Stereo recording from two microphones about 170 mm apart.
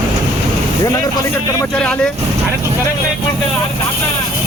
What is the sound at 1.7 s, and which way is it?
Speech, 5° left (ahead or behind).